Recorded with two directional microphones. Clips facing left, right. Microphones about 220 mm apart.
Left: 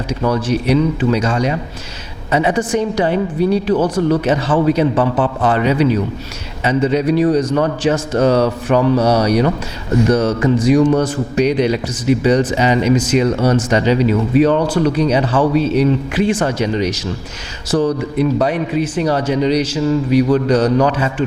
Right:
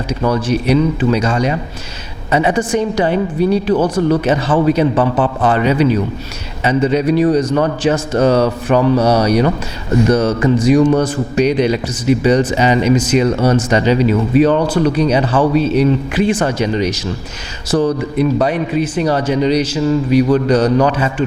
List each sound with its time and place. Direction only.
0.2 s mantra: 25° right (ahead or behind)
0.8 s a man's voice: 20° right (ahead or behind)
3.8 s mantra: 30° right (ahead or behind)
4.2 s a man's voice: 15° right (ahead or behind)
7.4 s mantra: 20° right (ahead or behind)
7.8 s a man's voice: 10° right (ahead or behind)
8.4 s mantra: 20° right (ahead or behind)
9.2 s a man's voice: 10° right (ahead or behind)
10.2 s mantra: 25° right (ahead or behind)
11.0 s a man's voice: 10° right (ahead or behind)
13.2 s a man's voice: 25° right (ahead or behind)
17.7 s mantra: 20° right (ahead or behind)
18.2 s a man's voice: 15° right (ahead or behind)